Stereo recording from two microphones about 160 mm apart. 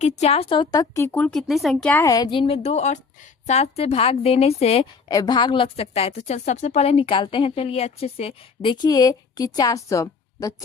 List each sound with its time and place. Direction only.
0.0 s a woman's voice: 40° left (ahead or behind); by 2.0 s 10° left (ahead or behind)
2.0 s a woman's voice: 25° left (ahead or behind)
5.0 s a woman's voice: 25° left (ahead or behind)